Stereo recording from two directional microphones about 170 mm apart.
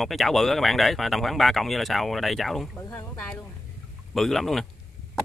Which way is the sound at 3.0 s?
15° left (ahead or behind).